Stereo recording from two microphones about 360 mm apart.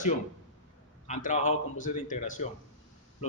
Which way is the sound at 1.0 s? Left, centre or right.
Centre.